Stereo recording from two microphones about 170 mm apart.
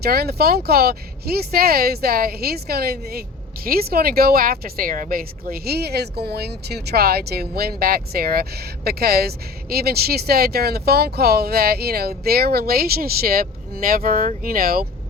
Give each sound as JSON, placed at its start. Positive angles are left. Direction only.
{"t": 0.0, "sound": "speech", "side_deg": -65}